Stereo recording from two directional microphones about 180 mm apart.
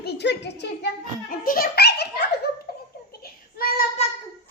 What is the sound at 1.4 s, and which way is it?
Speech, 55° left (ahead or behind).